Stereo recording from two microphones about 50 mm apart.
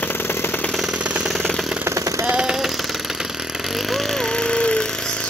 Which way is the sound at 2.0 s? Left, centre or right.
Right.